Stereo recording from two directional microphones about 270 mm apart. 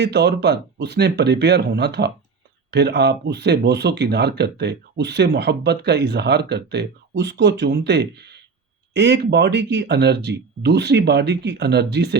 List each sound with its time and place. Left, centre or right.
0.0 s speech: right